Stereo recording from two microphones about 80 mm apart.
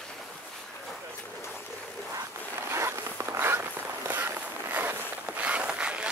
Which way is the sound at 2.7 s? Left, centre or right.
Right.